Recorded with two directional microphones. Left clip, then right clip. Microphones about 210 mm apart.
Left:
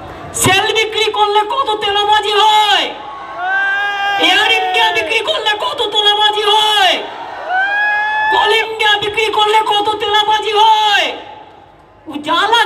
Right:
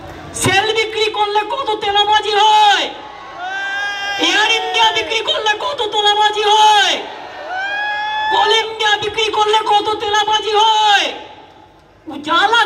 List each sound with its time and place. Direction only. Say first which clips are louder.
0.4 s a woman's voice: left 2 dB; 25° left (ahead or behind)
3.4 s a sound: left 6 dB; 45° left (ahead or behind)
4.2 s a man's voice: left 2 dB; 20° left (ahead or behind)
7.5 s emergency vehicle: left 6 dB; 45° left (ahead or behind)
8.4 s a man's voice: left 2 dB; 20° left (ahead or behind)
12.3 s a man's voice: left 1 dB; 25° left (ahead or behind)